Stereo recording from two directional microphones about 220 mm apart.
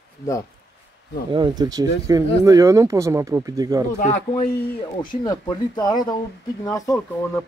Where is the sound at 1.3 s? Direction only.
20° right (ahead or behind).